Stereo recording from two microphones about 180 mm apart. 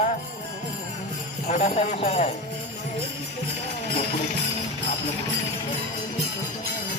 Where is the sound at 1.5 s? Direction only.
35° left (ahead or behind).